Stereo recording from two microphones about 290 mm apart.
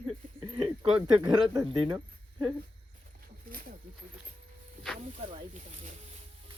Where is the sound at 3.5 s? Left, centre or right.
Right.